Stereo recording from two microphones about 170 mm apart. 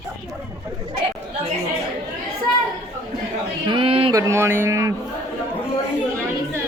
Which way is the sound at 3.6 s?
30° right (ahead or behind).